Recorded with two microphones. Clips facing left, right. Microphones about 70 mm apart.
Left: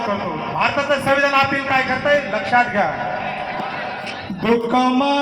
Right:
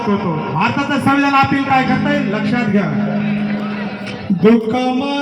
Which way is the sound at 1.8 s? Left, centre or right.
Left.